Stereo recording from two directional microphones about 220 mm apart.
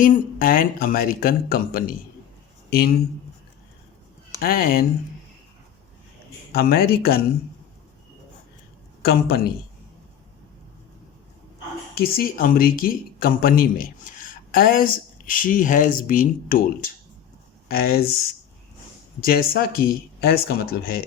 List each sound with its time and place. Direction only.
0.0 s speech: 40° left (ahead or behind)
4.4 s speech: 40° left (ahead or behind)
6.5 s speech: 45° left (ahead or behind)
9.0 s a woman's voice: 45° left (ahead or behind)
11.9 s speech: 40° left (ahead or behind)
19.2 s speech: 40° left (ahead or behind)